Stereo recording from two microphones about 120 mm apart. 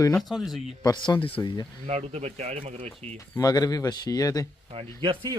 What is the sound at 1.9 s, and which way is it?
Speech, 65° right (ahead or behind).